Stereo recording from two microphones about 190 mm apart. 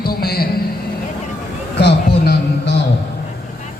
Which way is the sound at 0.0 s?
55° left (ahead or behind).